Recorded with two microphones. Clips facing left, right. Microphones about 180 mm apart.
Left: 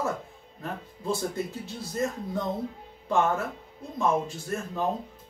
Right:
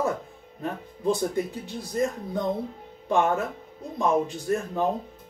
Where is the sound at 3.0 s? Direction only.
15° right (ahead or behind).